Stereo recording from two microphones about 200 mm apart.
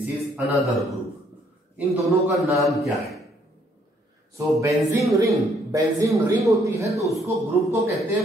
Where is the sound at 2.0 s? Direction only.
Centre (ahead or behind).